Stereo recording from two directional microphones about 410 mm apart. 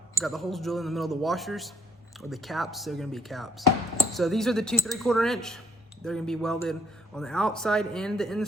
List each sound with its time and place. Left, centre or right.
0.1 s speech: centre